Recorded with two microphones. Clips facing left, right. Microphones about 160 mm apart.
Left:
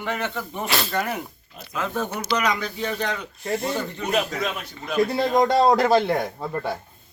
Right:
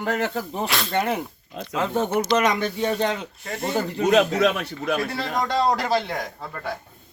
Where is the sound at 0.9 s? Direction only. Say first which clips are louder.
Right 3 dB; 25° right (ahead or behind).